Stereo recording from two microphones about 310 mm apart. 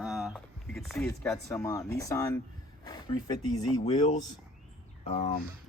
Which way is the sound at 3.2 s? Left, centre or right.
Centre.